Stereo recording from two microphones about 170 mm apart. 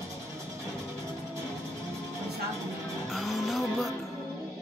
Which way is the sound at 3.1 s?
Centre (ahead or behind).